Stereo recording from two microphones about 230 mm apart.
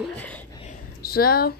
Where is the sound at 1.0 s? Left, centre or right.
Left.